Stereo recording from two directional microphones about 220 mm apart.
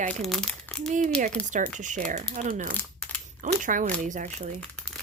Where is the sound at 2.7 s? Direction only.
5° left (ahead or behind).